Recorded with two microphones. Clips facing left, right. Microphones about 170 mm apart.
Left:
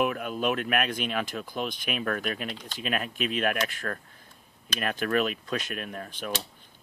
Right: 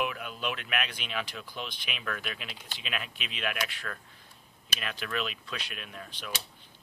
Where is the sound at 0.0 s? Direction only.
45° left (ahead or behind).